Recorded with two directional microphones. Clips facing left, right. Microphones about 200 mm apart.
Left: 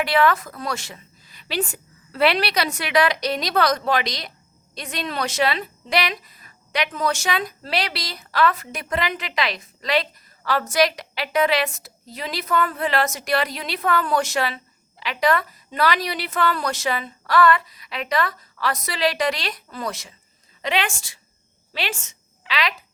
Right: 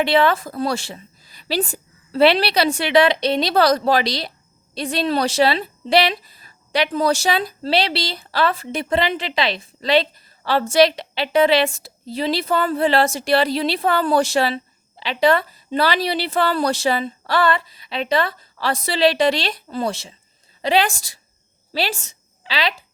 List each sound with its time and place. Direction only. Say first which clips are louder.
0.0 s a woman's voice: right 3 dB; 25° right (ahead or behind)